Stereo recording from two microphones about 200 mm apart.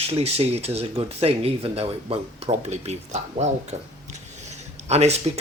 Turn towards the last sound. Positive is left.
turn(degrees=-30)  # may be behind; listen again after turning